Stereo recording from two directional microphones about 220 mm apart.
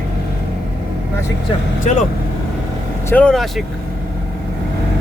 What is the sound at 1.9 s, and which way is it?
Speech, 30° left (ahead or behind).